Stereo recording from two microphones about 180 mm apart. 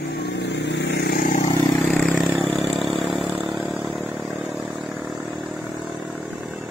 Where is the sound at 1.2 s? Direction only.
45° left (ahead or behind).